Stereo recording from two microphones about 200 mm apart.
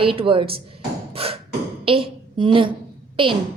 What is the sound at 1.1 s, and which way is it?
Beatboxing, 30° right (ahead or behind).